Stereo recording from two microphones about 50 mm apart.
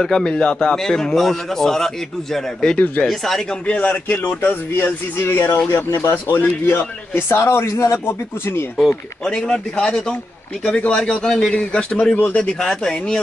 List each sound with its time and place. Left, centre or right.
0.0 s speech: centre
0.4 s a man's voice: left
0.7 s speech: centre
3.6 s a man's voice: left
4.1 s speech: left
6.8 s speech: left
7.3 s speech: left
8.0 s speech: left
9.2 s speech: centre
10.6 s a man's voice: left